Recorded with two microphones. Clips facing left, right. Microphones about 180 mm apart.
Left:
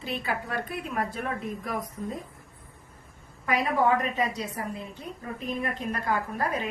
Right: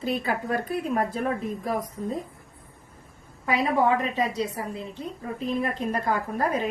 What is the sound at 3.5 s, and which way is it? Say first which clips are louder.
A woman's voice: right 2 dB; 30° right (ahead or behind).